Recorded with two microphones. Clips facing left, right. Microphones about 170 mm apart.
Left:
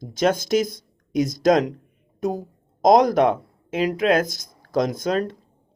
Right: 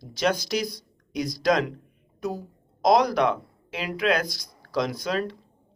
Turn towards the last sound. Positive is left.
turn(degrees=45)  # may be behind; listen again after turning